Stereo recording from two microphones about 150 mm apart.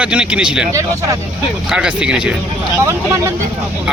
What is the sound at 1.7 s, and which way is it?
Speech, 5° right (ahead or behind).